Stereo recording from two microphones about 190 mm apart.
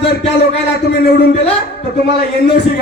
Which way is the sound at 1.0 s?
55° left (ahead or behind).